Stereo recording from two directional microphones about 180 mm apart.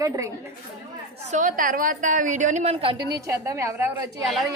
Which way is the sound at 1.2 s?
45° right (ahead or behind).